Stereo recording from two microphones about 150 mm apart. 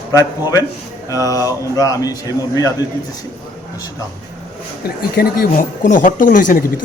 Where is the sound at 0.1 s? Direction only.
25° left (ahead or behind).